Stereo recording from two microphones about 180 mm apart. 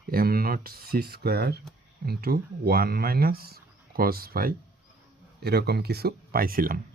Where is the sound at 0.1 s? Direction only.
55° right (ahead or behind).